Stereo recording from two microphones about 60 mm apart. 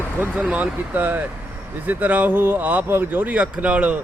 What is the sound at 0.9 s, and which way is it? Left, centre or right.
Speech, right.